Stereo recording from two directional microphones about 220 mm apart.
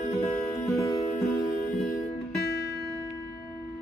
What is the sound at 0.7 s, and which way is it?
Music, 15° left (ahead or behind).